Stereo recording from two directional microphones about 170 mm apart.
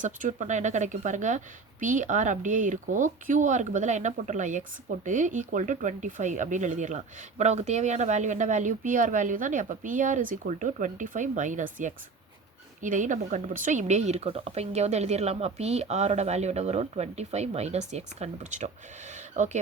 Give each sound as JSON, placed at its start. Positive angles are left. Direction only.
{"t": 0.0, "sound": "speech", "side_deg": -50}